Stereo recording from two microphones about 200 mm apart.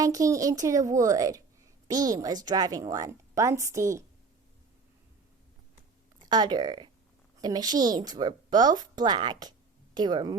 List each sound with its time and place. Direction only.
0.0 s a woman's voice: 15° right (ahead or behind)
6.2 s a woman's voice: 20° right (ahead or behind)